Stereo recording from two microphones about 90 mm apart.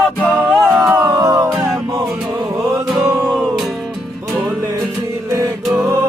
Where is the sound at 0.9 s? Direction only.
30° right (ahead or behind).